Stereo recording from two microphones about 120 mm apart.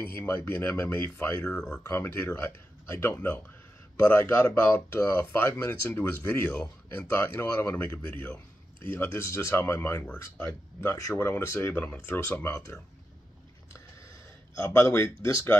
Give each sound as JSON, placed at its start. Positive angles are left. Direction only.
{"t": 0.0, "sound": "speech", "side_deg": 20}
{"t": 1.8, "sound": "speech", "side_deg": 20}
{"t": 14.6, "sound": "speech", "side_deg": 25}